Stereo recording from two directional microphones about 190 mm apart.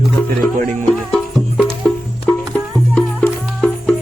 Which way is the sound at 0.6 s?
40° right (ahead or behind).